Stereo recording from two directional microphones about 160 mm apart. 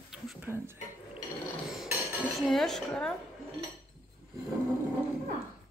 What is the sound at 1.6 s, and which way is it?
Dishes, centre (ahead or behind).